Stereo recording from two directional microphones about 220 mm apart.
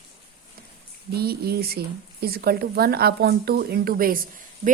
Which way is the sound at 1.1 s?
45° right (ahead or behind).